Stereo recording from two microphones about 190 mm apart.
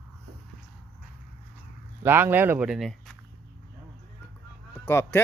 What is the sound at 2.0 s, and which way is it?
Speech, 10° right (ahead or behind).